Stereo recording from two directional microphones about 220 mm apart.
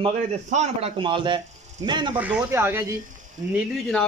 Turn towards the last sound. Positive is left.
turn(degrees=5)  # may be behind; listen again after turning